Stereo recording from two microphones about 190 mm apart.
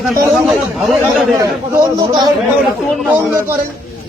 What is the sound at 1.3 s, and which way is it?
A man's voice, 15° right (ahead or behind).